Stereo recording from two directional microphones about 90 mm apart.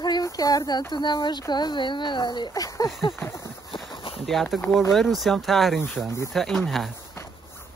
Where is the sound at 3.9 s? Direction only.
75° left (ahead or behind).